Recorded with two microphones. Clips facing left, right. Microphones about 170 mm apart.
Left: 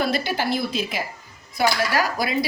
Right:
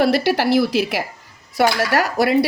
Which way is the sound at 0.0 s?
70° right (ahead or behind).